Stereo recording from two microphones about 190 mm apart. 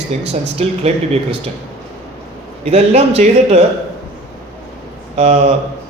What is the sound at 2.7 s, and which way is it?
Speech, 35° right (ahead or behind).